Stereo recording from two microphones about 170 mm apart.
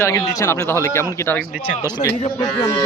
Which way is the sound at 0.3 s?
15° left (ahead or behind).